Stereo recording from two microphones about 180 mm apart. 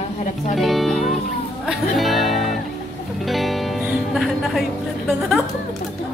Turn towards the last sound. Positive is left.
turn(degrees=0)  # may be behind; listen again after turning